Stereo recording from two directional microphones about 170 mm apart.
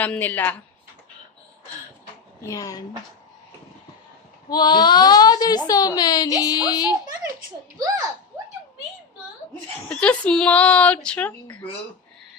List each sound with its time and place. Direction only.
0.0 s speech: 10° left (ahead or behind)
2.5 s a woman's voice: 20° left (ahead or behind)
4.4 s a woman's voice: 25° left (ahead or behind)
9.9 s speech: 5° left (ahead or behind)